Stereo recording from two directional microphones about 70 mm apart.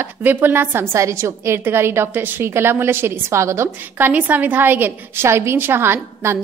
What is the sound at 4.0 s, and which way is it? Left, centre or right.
A woman's voice, right.